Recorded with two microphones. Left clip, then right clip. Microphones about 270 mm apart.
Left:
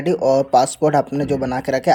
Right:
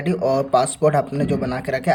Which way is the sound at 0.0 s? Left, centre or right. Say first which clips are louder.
Left 4 dB; left.